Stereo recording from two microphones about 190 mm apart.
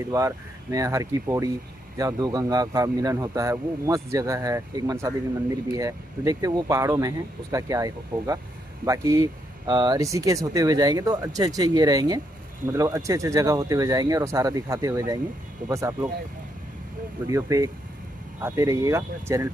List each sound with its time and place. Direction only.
0.1 s a man's voice: 20° right (ahead or behind)
17.3 s a man's voice: 15° right (ahead or behind)